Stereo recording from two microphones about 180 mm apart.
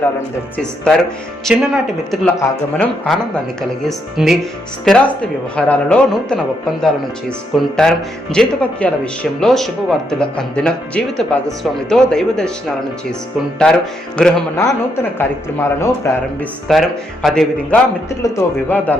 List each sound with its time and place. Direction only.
0.5 s speech: 5° left (ahead or behind)
13.6 s speech: 5° left (ahead or behind)
14.6 s speech: 15° left (ahead or behind)
16.7 s speech: centre (ahead or behind)
18.2 s speech: 15° left (ahead or behind)